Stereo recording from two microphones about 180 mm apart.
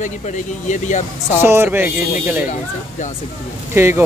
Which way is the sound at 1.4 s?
15° right (ahead or behind).